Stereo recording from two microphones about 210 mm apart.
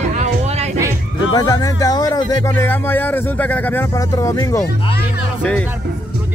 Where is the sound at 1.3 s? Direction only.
20° left (ahead or behind).